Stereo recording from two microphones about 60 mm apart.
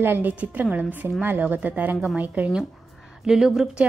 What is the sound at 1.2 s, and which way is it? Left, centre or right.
A woman's voice, right.